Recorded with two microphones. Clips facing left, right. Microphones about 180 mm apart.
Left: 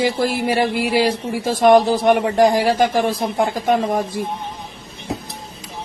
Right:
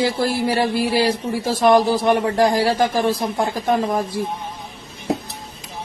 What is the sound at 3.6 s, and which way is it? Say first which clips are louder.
Speech: left 1 dB; 20° left (ahead or behind).